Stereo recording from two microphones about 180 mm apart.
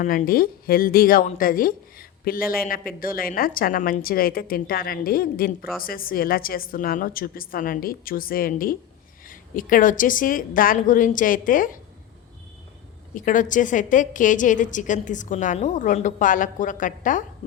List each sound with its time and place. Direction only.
0.0 s speech: 50° left (ahead or behind)
13.1 s speech: 45° left (ahead or behind)